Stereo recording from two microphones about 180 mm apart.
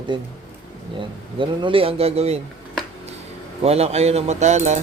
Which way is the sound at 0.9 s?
25° right (ahead or behind).